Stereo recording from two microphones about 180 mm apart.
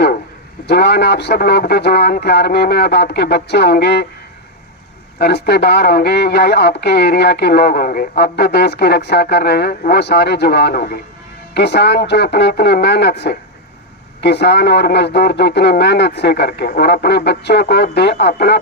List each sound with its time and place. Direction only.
0.7 s speech: 65° left (ahead or behind)
5.2 s speech: 65° left (ahead or behind)